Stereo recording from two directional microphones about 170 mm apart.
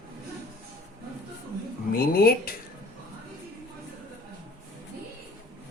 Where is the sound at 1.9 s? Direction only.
60° left (ahead or behind).